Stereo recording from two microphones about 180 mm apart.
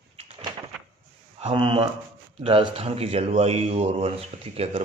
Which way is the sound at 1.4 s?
30° right (ahead or behind).